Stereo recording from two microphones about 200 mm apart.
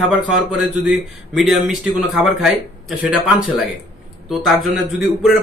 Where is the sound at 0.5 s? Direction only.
5° right (ahead or behind).